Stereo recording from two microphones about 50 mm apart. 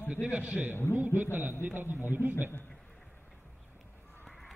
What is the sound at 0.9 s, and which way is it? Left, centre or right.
A man's voice, right.